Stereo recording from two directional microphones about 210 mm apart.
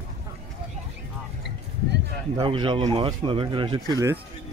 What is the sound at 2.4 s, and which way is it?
Speech, 25° right (ahead or behind).